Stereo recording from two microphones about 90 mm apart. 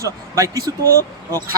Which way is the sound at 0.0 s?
35° right (ahead or behind).